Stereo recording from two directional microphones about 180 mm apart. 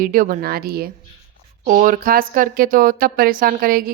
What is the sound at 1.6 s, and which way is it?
Speech, 45° right (ahead or behind).